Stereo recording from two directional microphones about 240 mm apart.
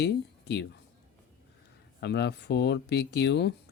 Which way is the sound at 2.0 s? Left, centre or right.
Left.